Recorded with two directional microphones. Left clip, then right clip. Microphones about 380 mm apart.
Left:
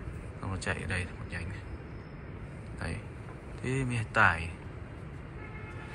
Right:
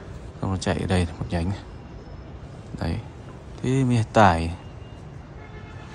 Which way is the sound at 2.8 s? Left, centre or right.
Centre.